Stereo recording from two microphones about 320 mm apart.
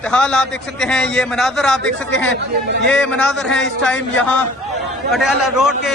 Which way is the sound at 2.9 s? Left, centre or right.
Centre.